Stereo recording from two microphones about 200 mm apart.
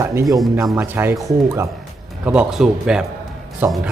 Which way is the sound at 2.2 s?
5° right (ahead or behind).